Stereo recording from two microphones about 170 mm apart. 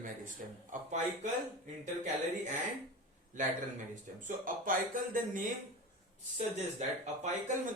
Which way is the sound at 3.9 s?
50° right (ahead or behind).